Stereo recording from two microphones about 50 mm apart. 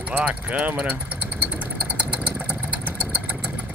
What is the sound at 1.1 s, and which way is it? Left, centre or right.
Vehicle, right.